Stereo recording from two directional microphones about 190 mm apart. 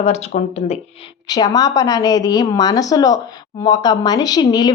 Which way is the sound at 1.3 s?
20° left (ahead or behind).